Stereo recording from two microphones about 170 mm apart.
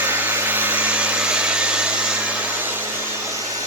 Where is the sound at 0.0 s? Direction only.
10° right (ahead or behind).